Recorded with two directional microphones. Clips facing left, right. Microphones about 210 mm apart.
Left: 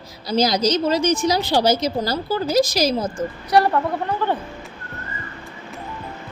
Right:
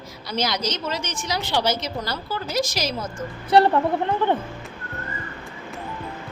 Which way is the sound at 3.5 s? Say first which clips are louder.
Right 1 dB; 25° right (ahead or behind).